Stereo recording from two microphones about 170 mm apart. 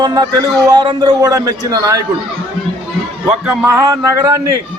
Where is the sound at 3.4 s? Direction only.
15° right (ahead or behind).